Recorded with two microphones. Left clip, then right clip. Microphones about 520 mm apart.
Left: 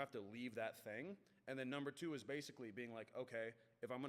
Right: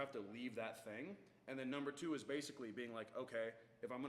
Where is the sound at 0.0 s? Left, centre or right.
Left.